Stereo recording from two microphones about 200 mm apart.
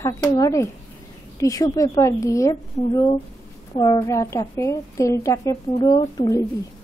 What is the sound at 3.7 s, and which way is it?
Speech, 20° left (ahead or behind).